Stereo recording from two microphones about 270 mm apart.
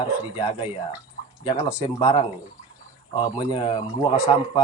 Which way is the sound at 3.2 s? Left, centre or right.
Centre.